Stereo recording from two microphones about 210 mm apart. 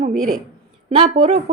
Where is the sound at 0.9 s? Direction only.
30° right (ahead or behind).